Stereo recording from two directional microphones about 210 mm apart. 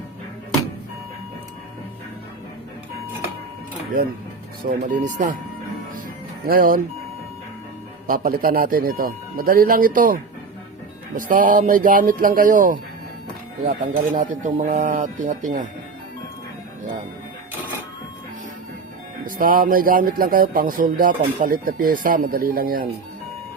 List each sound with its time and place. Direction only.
4.8 s a man's voice: 35° right (ahead or behind)
6.5 s speech: 45° right (ahead or behind)
8.0 s a man's voice: 40° right (ahead or behind)
19.2 s a man's voice: 40° right (ahead or behind)